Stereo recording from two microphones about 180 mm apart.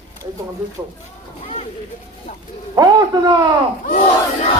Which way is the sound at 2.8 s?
20° right (ahead or behind).